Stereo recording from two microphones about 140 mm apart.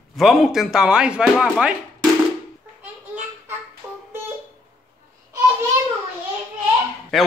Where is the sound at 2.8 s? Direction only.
15° right (ahead or behind).